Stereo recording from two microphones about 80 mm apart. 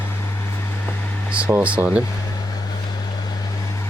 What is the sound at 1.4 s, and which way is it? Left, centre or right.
Speech, right.